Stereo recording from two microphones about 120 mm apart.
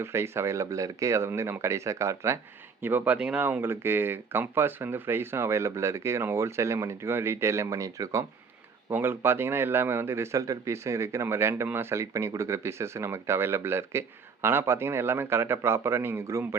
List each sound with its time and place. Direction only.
0.0 s speech: 20° right (ahead or behind)